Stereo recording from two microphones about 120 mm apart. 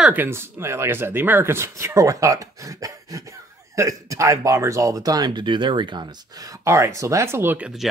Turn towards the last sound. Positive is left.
turn(degrees=-15)  # may be behind; listen again after turning